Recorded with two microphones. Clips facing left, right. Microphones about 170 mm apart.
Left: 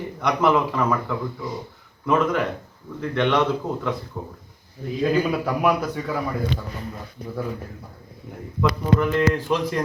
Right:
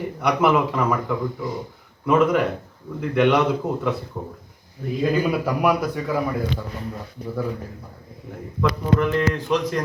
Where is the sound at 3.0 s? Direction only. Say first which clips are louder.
Right 3 dB; 10° right (ahead or behind).